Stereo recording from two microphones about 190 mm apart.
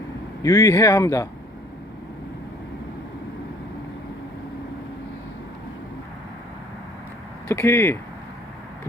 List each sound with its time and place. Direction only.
0.4 s speech: 15° left (ahead or behind)
7.4 s speech: 10° left (ahead or behind)